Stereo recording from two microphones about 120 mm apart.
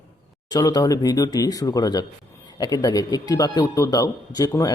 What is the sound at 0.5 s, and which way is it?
Speech, 30° left (ahead or behind).